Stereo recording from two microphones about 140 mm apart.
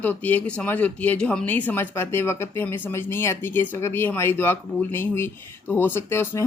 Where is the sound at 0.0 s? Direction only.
10° left (ahead or behind).